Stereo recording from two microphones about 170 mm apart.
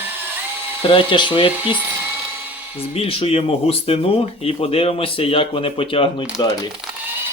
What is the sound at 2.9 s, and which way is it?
Speech, 35° left (ahead or behind).